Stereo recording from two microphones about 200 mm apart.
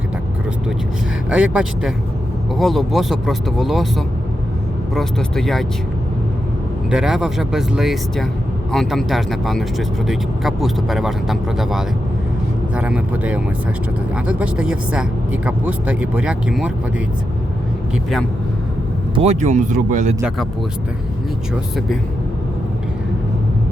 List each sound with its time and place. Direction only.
1.3 s speech: 5° right (ahead or behind)
6.9 s speech: 5° right (ahead or behind)
17.9 s speech: centre (ahead or behind)
19.1 s speech: 30° right (ahead or behind)